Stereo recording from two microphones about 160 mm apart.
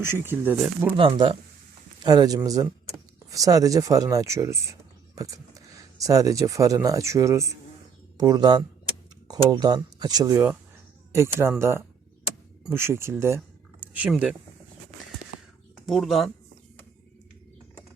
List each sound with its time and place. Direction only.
0.1 s speech: 15° right (ahead or behind)
0.9 s speech: 35° right (ahead or behind); by 14.1 s 15° right (ahead or behind)
14.1 s speech: 5° right (ahead or behind)
15.9 s speech: centre (ahead or behind)